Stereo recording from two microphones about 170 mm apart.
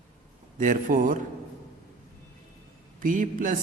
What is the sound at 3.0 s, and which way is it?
Speech, 50° right (ahead or behind).